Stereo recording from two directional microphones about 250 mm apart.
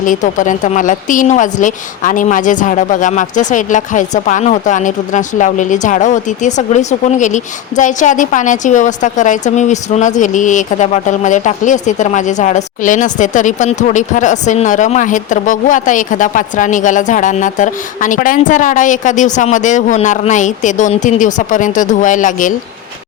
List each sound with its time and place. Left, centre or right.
0.0 s a woman's voice: left